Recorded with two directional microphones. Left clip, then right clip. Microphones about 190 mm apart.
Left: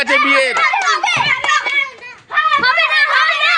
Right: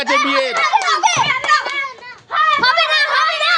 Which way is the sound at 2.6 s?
85° right.